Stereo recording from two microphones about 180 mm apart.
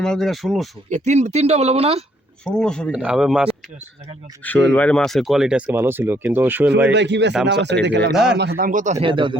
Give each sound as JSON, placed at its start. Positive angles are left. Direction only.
{"t": 0.0, "sound": "speech", "side_deg": 5}
{"t": 0.9, "sound": "speech", "side_deg": -40}
{"t": 2.4, "sound": "speech", "side_deg": 5}
{"t": 4.4, "sound": "speech", "side_deg": 10}
{"t": 6.9, "sound": "speech", "side_deg": -75}
{"t": 8.1, "sound": "speech", "side_deg": 0}
{"t": 8.4, "sound": "speech", "side_deg": -55}